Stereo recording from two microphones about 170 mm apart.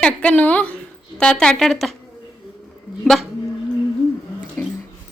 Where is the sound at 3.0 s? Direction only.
5° left (ahead or behind).